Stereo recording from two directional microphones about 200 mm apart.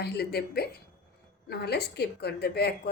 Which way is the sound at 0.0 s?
55° left (ahead or behind).